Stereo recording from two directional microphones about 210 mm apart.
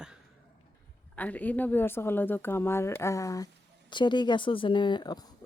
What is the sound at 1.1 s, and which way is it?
Speech, 5° left (ahead or behind).